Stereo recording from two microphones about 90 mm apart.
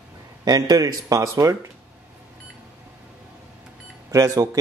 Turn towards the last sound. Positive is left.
turn(degrees=-40)  # may be behind; listen again after turning